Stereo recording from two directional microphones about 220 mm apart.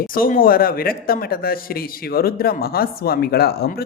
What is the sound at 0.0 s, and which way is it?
A man's voice, 40° left (ahead or behind).